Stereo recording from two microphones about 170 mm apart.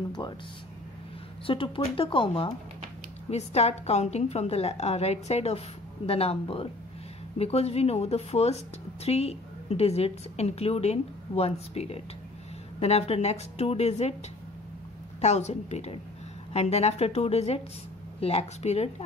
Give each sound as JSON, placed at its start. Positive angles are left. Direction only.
{"t": 1.4, "sound": "a woman's voice", "side_deg": 30}
{"t": 15.1, "sound": "a woman's voice", "side_deg": 40}